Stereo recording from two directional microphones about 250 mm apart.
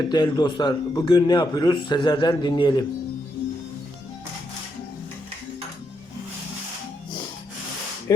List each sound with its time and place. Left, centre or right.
0.1 s a man's voice: centre